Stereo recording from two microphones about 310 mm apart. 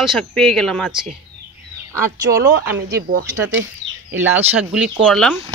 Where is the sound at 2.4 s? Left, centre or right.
Right.